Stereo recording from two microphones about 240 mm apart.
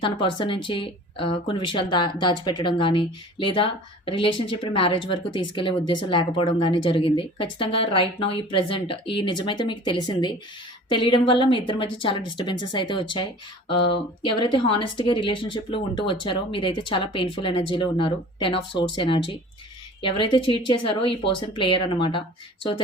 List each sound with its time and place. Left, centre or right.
0.0 s speech: left
13.7 s speech: left